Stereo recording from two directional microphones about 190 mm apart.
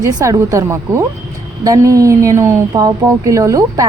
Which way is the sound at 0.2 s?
15° right (ahead or behind).